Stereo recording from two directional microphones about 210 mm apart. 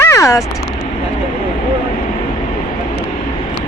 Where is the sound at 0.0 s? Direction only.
15° left (ahead or behind).